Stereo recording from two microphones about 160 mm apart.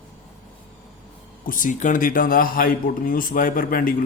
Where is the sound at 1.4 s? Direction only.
55° left (ahead or behind).